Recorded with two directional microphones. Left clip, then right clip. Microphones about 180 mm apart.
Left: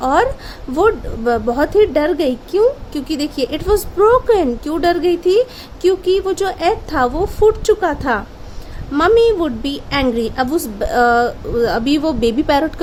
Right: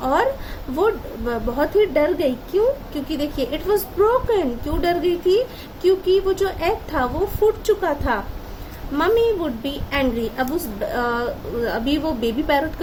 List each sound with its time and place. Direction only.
0.0 s a woman's voice: 55° left (ahead or behind)